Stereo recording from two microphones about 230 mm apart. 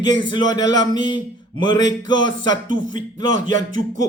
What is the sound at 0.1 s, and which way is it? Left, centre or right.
Speech, centre.